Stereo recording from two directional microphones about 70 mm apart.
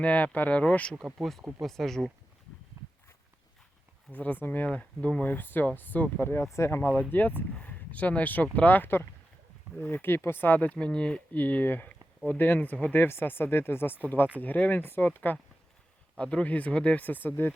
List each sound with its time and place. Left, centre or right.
0.0 s speech: left
1.2 s speech: centre
2.8 s walk: right
4.1 s speech: left
7.1 s speech: left
10.8 s speech: centre
11.3 s speech: left
16.1 s speech: centre; by 17.5 s left